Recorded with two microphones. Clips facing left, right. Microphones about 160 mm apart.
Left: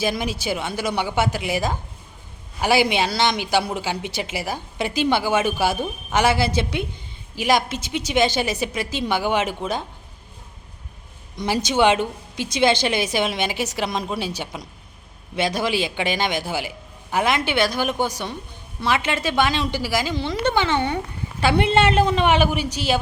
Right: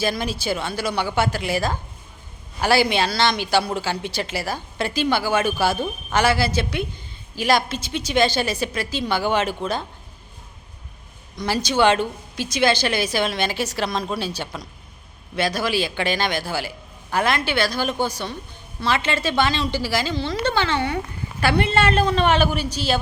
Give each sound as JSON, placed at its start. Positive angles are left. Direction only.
{"t": 0.0, "sound": "speech", "side_deg": 15}
{"t": 11.3, "sound": "a woman's voice", "side_deg": 20}